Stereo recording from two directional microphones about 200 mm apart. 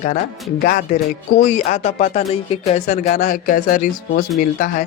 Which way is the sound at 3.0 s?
45° left (ahead or behind).